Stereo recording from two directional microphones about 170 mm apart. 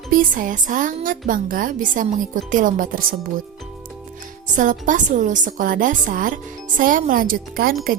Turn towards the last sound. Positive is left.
turn(degrees=-60)  # may be behind; listen again after turning